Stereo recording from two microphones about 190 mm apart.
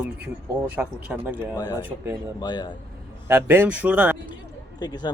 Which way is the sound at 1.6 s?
20° left (ahead or behind).